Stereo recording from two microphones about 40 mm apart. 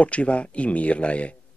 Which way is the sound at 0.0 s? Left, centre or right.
Left.